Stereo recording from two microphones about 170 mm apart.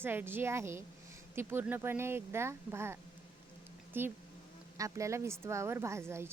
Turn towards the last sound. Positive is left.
turn(degrees=-15)  # may be behind; listen again after turning